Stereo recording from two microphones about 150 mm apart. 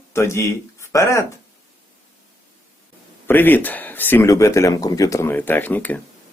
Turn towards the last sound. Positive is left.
turn(degrees=10)  # may be behind; listen again after turning